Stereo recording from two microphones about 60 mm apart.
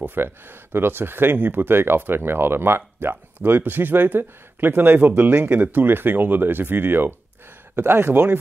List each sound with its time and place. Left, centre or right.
0.0 s speech: right